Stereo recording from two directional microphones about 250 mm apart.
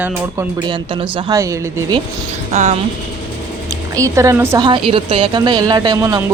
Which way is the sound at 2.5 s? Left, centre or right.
Right.